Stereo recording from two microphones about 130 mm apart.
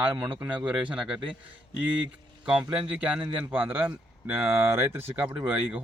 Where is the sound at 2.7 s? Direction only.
10° right (ahead or behind).